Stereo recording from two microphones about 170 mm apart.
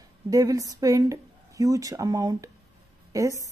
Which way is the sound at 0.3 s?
20° right (ahead or behind).